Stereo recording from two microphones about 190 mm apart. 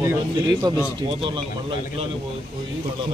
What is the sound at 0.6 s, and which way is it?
Speech, 20° right (ahead or behind).